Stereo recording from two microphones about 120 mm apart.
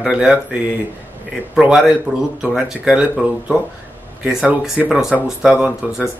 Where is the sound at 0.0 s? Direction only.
5° right (ahead or behind).